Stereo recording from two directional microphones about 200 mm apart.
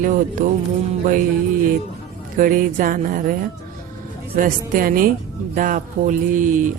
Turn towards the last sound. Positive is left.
turn(degrees=-40)  # may be behind; listen again after turning